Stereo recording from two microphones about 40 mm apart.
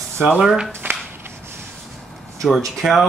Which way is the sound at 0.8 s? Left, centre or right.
Right.